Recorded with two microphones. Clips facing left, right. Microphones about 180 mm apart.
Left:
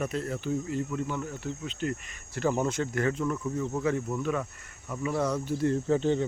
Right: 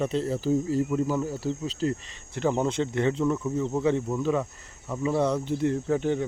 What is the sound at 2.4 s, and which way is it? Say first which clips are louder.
Speech: right 2 dB; 20° right (ahead or behind).